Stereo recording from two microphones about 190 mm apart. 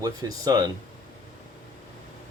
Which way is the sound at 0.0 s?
20° right (ahead or behind).